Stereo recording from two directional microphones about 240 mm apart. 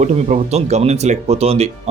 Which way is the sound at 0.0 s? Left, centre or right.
Right.